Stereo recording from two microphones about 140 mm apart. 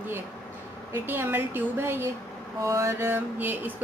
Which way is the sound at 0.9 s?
15° right (ahead or behind).